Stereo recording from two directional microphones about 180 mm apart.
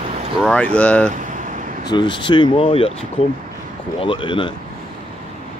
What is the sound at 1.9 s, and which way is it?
Speech, 25° left (ahead or behind).